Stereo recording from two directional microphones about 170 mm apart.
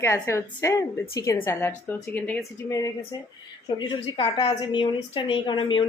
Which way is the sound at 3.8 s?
35° left (ahead or behind).